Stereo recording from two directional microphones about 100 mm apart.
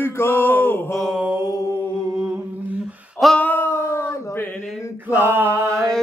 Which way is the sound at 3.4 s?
20° left (ahead or behind).